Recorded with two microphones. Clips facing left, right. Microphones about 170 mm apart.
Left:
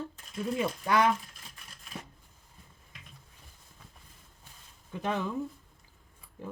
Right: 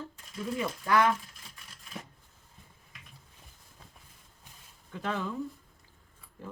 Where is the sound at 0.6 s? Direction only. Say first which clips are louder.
Even; 25° left (ahead or behind).